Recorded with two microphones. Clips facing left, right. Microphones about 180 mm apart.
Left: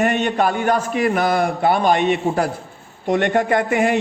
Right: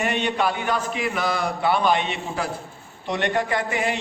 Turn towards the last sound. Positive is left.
turn(degrees=50)  # may be behind; listen again after turning